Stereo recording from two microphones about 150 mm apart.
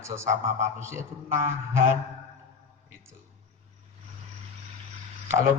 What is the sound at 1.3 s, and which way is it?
Speech, 20° right (ahead or behind).